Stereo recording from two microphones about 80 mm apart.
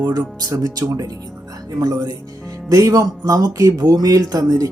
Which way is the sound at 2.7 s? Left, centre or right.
Right.